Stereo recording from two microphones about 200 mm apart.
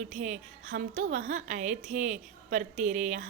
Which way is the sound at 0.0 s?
35° right (ahead or behind).